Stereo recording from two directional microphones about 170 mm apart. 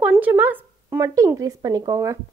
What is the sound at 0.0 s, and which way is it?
A woman's voice, 10° right (ahead or behind).